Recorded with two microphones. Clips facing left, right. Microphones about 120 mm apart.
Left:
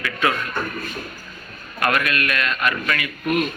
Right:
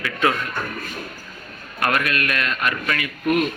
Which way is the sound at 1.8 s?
35° right (ahead or behind).